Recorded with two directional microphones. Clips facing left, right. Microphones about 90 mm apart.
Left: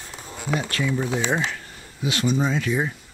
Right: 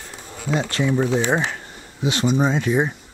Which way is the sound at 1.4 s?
25° right (ahead or behind).